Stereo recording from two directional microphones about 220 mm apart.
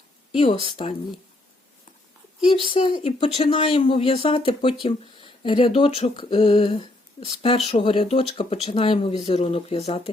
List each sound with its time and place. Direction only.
0.3 s speech: 25° left (ahead or behind)
2.6 s speech: 25° left (ahead or behind)